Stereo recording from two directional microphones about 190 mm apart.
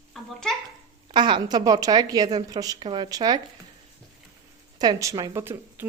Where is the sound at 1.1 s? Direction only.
25° right (ahead or behind).